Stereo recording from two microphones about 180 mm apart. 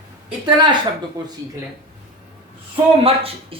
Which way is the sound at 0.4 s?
25° right (ahead or behind).